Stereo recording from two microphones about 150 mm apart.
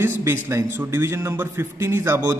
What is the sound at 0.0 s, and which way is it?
A man's voice, 15° right (ahead or behind).